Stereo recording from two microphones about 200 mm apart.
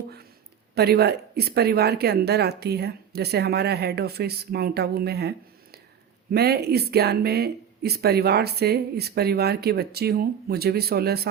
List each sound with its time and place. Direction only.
0.8 s speech: 55° right (ahead or behind)
6.3 s speech: 55° right (ahead or behind)